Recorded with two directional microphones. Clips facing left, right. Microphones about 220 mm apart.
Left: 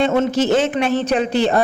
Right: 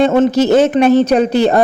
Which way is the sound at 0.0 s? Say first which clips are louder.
Right 5 dB; 40° right (ahead or behind).